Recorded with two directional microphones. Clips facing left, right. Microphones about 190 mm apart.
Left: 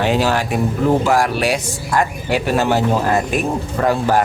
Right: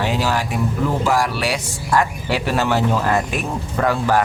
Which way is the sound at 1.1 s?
50° left (ahead or behind).